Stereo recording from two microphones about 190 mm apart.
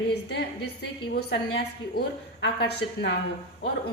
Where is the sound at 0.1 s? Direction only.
60° left (ahead or behind).